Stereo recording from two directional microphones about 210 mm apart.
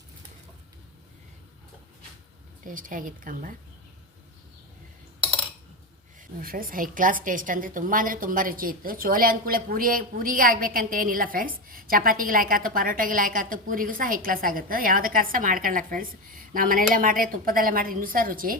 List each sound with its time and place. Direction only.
2.6 s a woman's voice: 40° right (ahead or behind)
6.4 s a woman's voice: 40° right (ahead or behind)